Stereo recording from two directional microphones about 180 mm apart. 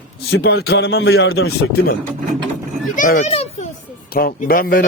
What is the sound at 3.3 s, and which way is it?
Speech, 35° left (ahead or behind).